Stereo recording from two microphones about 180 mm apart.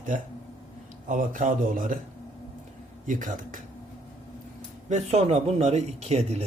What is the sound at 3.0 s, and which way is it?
Speech, 45° right (ahead or behind).